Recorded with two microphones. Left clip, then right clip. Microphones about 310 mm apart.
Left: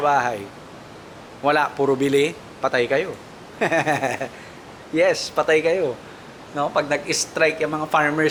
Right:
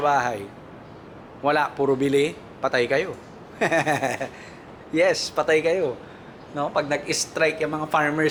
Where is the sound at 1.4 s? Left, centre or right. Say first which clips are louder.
Left 2 dB; centre.